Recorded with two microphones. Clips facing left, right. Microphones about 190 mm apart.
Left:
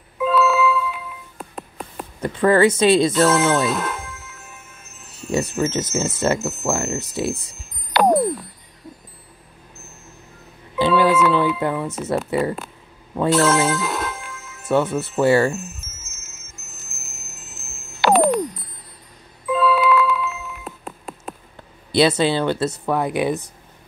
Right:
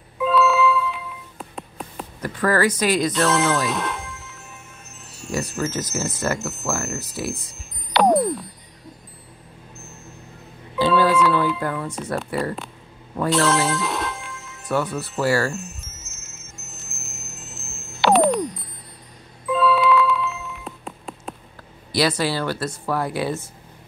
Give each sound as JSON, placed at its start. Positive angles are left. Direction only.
{"t": 0.2, "sound": "music", "side_deg": 0}
{"t": 2.2, "sound": "speech", "side_deg": 25}
{"t": 3.1, "sound": "music", "side_deg": 0}
{"t": 5.6, "sound": "speech", "side_deg": 20}
{"t": 7.9, "sound": "music", "side_deg": 0}
{"t": 10.8, "sound": "music", "side_deg": 20}
{"t": 11.1, "sound": "music", "side_deg": 5}
{"t": 11.7, "sound": "speech", "side_deg": 5}
{"t": 12.3, "sound": "speech", "side_deg": 20}
{"t": 13.3, "sound": "music", "side_deg": 0}
{"t": 14.7, "sound": "speech", "side_deg": 25}
{"t": 15.5, "sound": "chime", "side_deg": 0}
{"t": 19.4, "sound": "a sound", "side_deg": 0}
{"t": 21.9, "sound": "speech", "side_deg": 25}